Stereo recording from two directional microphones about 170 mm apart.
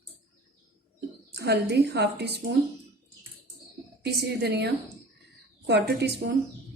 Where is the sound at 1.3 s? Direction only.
80° right.